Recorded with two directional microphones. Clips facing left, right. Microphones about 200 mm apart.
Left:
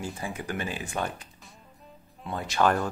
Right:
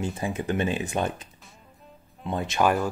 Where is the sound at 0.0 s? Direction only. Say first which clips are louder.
Right 6 dB; 25° right (ahead or behind).